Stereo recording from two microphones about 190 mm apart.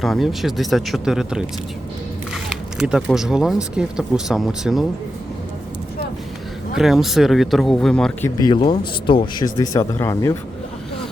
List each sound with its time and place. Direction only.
0.0 s speech: centre (ahead or behind)
2.3 s single-lens reflex camera: 5° right (ahead or behind)
3.8 s speech: 5° right (ahead or behind)
6.7 s speech: centre (ahead or behind)
8.6 s speech: 25° left (ahead or behind)